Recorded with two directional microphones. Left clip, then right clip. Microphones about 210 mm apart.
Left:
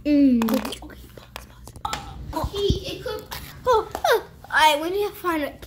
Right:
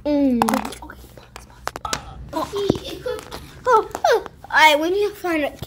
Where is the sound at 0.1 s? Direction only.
75° right (ahead or behind).